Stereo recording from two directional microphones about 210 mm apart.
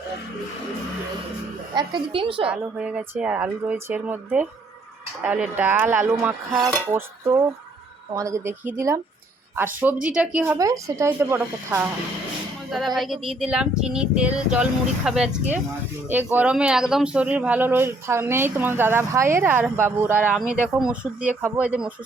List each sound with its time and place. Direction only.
1.7 s a woman's voice: 25° right (ahead or behind)
2.5 s speech: 5° right (ahead or behind)
8.1 s speech: 15° right (ahead or behind)
13.0 s speech: centre (ahead or behind)